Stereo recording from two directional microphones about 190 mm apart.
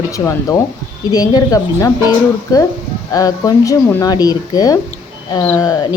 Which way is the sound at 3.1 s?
20° left (ahead or behind).